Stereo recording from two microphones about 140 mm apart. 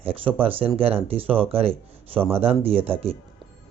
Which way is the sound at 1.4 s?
45° right (ahead or behind).